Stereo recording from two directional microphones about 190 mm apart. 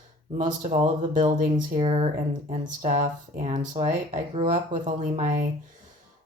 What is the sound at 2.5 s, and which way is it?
Speech, 40° right (ahead or behind).